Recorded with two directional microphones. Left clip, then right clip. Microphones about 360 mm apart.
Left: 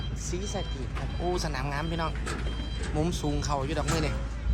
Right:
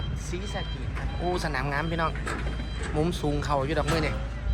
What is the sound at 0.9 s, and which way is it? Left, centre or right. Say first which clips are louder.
Speech: right 2 dB; centre.